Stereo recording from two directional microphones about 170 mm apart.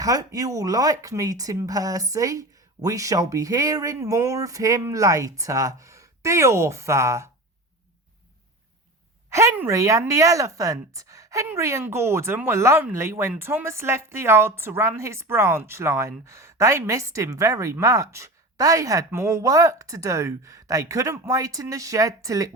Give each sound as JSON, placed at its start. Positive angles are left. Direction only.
{"t": 0.0, "sound": "speech", "side_deg": -20}
{"t": 9.3, "sound": "a woman's voice", "side_deg": -15}